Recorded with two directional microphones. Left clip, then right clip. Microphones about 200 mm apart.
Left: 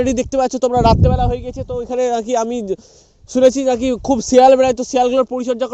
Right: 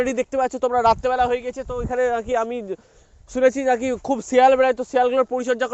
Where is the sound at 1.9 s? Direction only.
60° left (ahead or behind).